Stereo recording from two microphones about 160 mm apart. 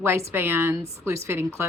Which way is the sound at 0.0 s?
15° right (ahead or behind).